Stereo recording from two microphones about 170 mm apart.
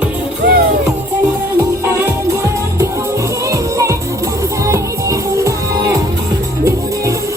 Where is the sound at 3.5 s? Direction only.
20° right (ahead or behind).